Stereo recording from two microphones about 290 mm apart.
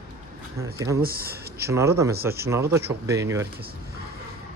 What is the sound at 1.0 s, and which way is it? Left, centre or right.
Speech, right.